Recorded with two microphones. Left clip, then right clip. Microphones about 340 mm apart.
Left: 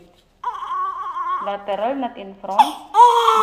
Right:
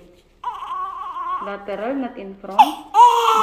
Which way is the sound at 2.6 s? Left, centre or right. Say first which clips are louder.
Even; centre.